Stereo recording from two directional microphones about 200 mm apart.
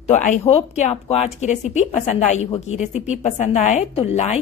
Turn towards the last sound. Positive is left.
turn(degrees=35)  # may be behind; listen again after turning